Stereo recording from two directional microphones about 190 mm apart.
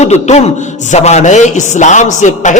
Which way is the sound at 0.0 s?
35° left (ahead or behind).